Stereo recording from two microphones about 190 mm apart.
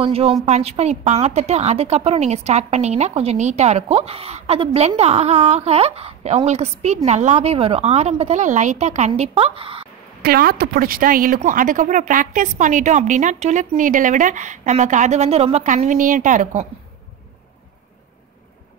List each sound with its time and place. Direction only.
0.0 s a woman's voice: 30° right (ahead or behind)
10.2 s a woman's voice: 50° right (ahead or behind)